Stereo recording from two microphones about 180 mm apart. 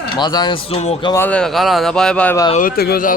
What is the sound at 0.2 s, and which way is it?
Speech, 25° left (ahead or behind).